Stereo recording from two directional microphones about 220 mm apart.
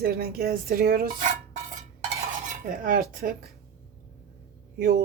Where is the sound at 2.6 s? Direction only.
40° right (ahead or behind).